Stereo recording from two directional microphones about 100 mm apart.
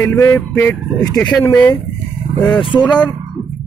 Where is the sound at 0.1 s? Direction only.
25° left (ahead or behind).